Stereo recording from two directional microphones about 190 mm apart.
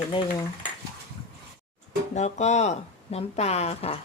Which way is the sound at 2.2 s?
35° left (ahead or behind).